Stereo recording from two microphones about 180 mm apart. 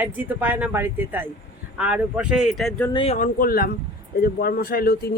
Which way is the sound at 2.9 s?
35° left (ahead or behind).